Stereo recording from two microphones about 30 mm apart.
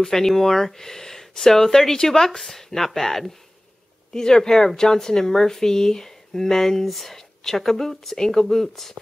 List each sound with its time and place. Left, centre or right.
0.0 s speech: centre
4.1 s speech: left